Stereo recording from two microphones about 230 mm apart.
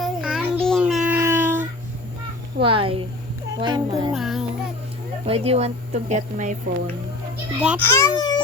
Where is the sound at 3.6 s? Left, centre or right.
Centre.